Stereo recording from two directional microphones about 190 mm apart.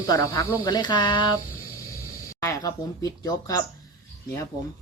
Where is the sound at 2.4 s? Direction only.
20° left (ahead or behind).